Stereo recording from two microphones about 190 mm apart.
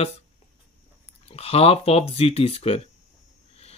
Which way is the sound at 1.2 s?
30° left (ahead or behind).